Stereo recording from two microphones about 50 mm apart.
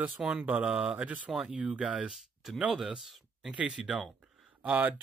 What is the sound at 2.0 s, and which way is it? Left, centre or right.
Speech, centre.